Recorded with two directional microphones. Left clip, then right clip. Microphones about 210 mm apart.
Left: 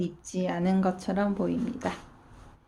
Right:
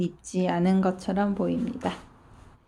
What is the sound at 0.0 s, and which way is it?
Speech, 20° right (ahead or behind).